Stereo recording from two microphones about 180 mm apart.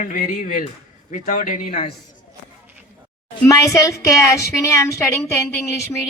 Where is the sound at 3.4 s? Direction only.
15° left (ahead or behind).